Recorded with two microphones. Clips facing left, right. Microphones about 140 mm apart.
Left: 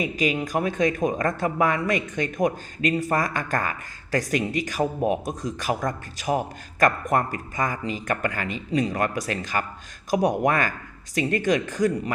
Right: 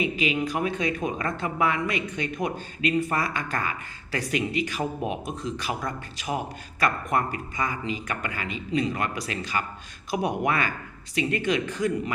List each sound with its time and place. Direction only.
0.0 s speech: 40° left (ahead or behind)